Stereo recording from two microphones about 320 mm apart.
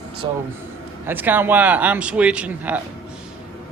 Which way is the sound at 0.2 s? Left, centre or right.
Centre.